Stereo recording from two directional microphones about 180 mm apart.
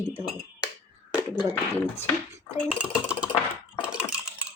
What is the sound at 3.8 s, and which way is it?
Typing, 5° right (ahead or behind).